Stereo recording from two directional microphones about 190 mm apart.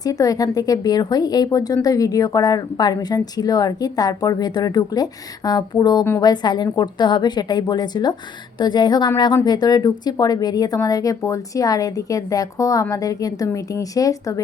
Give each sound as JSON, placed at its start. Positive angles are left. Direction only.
{"t": 0.0, "sound": "speech", "side_deg": 20}